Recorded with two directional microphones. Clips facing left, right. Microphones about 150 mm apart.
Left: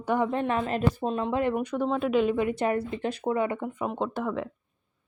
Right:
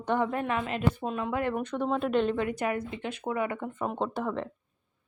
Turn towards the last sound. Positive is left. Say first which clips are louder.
# left 1 dB
turn(degrees=0)  # may be behind; listen again after turning